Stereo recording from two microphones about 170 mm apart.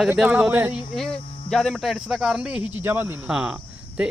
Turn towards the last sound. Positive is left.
turn(degrees=-5)  # may be behind; listen again after turning